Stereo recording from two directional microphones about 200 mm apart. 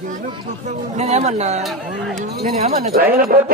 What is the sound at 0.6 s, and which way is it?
Speech, 35° right (ahead or behind).